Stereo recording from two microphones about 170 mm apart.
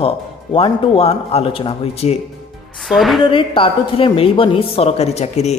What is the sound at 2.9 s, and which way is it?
Speech, centre (ahead or behind).